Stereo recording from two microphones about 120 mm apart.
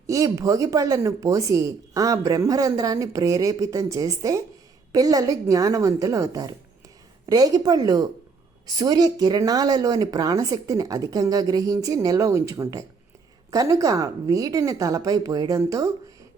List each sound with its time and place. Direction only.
0.1 s speech: 25° right (ahead or behind)